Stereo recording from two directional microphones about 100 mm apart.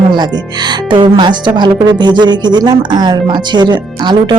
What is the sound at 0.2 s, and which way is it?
Speech, 45° right (ahead or behind).